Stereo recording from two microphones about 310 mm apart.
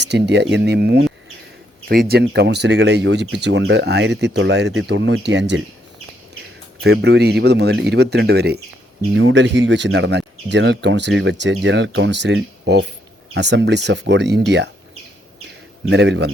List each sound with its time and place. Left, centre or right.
0.0 s speech: right
6.8 s speech: right
15.9 s speech: right